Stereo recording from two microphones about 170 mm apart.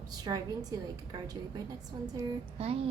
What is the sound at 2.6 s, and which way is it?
Speech, 35° right (ahead or behind).